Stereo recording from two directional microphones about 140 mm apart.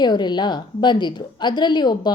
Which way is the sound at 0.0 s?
30° left (ahead or behind).